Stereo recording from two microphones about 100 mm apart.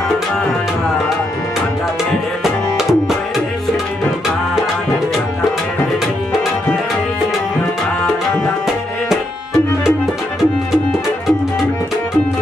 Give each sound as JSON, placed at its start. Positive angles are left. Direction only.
{"t": 2.4, "sound": "tabla", "side_deg": -5}